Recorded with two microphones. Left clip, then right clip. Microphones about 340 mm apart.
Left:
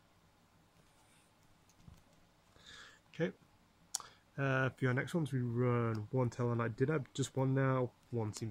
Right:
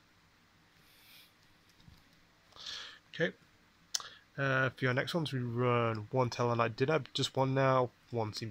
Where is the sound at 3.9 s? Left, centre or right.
Centre.